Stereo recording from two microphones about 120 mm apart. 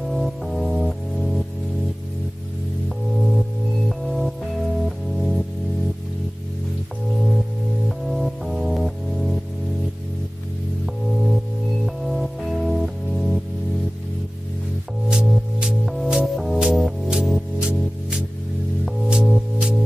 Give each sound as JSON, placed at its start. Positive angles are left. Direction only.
{"t": 0.1, "sound": "music", "side_deg": 0}
{"t": 4.0, "sound": "music", "side_deg": 0}
{"t": 8.1, "sound": "music", "side_deg": 0}
{"t": 11.8, "sound": "music", "side_deg": 0}
{"t": 15.0, "sound": "music", "side_deg": -5}